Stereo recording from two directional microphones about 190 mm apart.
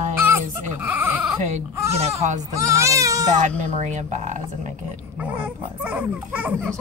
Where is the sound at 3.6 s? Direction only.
40° right (ahead or behind).